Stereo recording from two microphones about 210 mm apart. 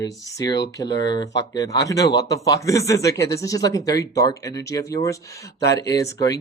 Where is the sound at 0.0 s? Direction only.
15° left (ahead or behind).